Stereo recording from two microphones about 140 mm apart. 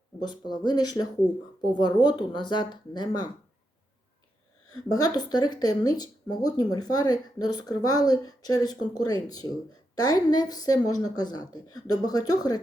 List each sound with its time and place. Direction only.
0.2 s speech: 30° left (ahead or behind)
4.7 s speech: 30° left (ahead or behind)